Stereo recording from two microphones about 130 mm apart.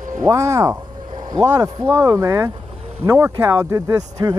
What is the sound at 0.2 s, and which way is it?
Speech, 25° right (ahead or behind).